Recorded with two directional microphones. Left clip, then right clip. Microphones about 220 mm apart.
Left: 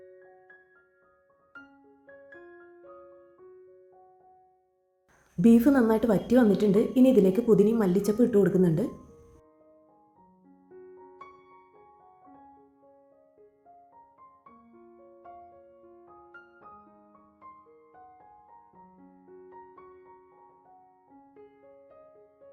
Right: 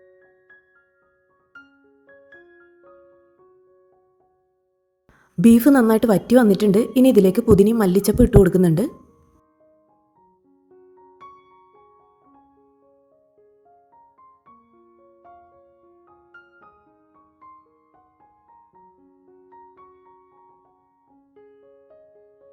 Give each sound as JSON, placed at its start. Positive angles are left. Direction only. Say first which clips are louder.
{"t": 0.0, "sound": "music", "louder": "left 1 dB", "side_deg": 0}
{"t": 2.0, "sound": "music", "louder": "right 1 dB", "side_deg": 0}
{"t": 5.4, "sound": "a woman's voice", "louder": "right 7 dB", "side_deg": -45}
{"t": 10.7, "sound": "music", "louder": "left 1 dB", "side_deg": 0}
{"t": 14.7, "sound": "music", "louder": "even", "side_deg": 0}
{"t": 18.9, "sound": "music", "louder": "left 1 dB", "side_deg": 0}